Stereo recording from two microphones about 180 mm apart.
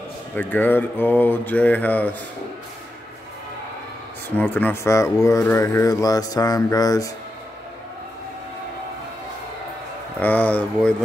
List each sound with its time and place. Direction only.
0.4 s speech: 10° left (ahead or behind)
4.4 s speech: 10° left (ahead or behind)
10.2 s speech: 10° left (ahead or behind)